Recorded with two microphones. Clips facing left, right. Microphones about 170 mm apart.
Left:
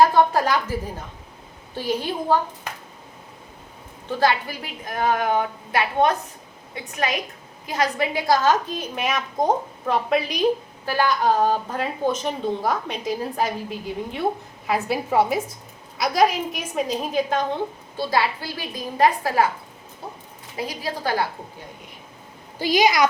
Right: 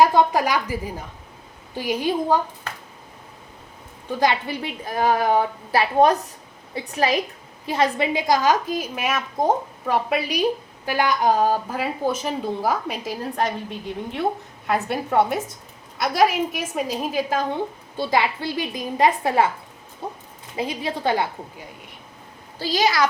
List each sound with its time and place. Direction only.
0.0 s a woman's voice: 15° right (ahead or behind)
2.7 s a sound: 10° left (ahead or behind)
4.2 s a woman's voice: 20° right (ahead or behind); by 17.4 s 5° right (ahead or behind)
17.9 s a woman's voice: 20° right (ahead or behind)
20.6 s a woman's voice: 25° right (ahead or behind)
22.5 s a woman's voice: 15° left (ahead or behind)